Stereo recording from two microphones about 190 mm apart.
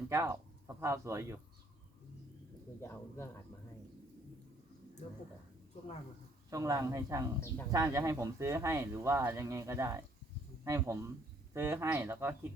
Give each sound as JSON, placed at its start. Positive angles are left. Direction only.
{"t": 0.1, "sound": "speech", "side_deg": -15}
{"t": 2.8, "sound": "speech", "side_deg": 15}
{"t": 6.5, "sound": "speech", "side_deg": -15}